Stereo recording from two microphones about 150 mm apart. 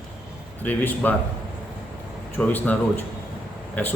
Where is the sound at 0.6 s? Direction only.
10° left (ahead or behind).